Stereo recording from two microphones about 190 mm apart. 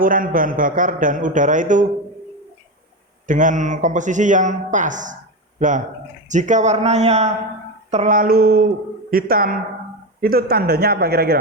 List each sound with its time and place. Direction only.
0.0 s a man's voice: 45° right (ahead or behind)
3.2 s a man's voice: 45° right (ahead or behind)